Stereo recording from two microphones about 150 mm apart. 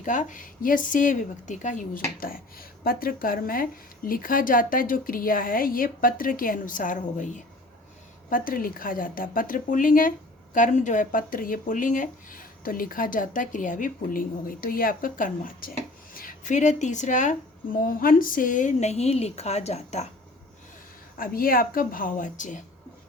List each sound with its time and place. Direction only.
0.0 s a woman's voice: 60° left (ahead or behind)
2.2 s a woman's voice: 80° left; by 7.4 s 55° left (ahead or behind)
8.3 s a woman's voice: 70° left (ahead or behind)
17.7 s speech: 70° left (ahead or behind); by 20.1 s 45° left (ahead or behind)
21.2 s a woman's voice: 75° left (ahead or behind); by 22.6 s 60° left (ahead or behind)